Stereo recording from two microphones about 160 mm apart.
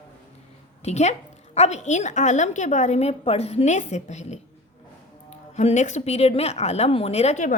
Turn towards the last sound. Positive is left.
turn(degrees=50)  # may be behind; listen again after turning